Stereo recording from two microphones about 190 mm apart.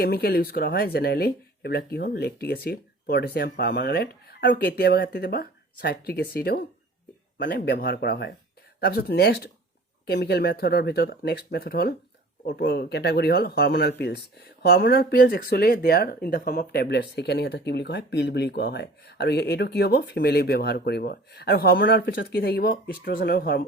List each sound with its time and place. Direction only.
0.0 s speech: 55° left (ahead or behind)